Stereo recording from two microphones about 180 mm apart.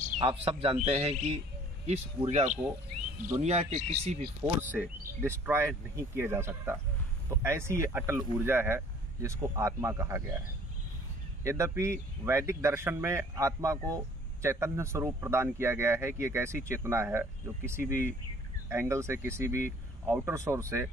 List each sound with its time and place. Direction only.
0.2 s speech: 30° right (ahead or behind)
4.6 s speech: 10° right (ahead or behind)
11.4 s speech: 15° right (ahead or behind)